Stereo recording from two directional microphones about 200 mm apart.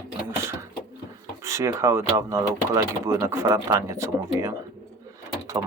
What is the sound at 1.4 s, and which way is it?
Speech, 15° right (ahead or behind).